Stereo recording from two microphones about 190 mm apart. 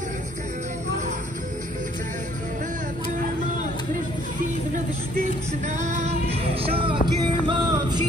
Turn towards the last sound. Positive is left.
turn(degrees=-20)  # may be behind; listen again after turning